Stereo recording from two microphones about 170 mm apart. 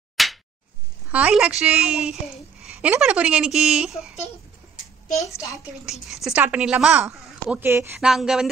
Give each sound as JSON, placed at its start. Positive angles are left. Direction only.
{"t": 0.2, "sound": "a sound", "side_deg": 0}
{"t": 1.1, "sound": "a woman's voice", "side_deg": -5}
{"t": 5.1, "sound": "a child's voice", "side_deg": 20}
{"t": 5.9, "sound": "a woman's voice", "side_deg": 0}